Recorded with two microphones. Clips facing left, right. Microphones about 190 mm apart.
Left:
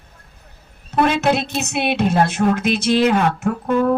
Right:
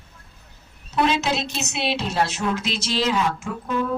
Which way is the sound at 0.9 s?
55° left (ahead or behind).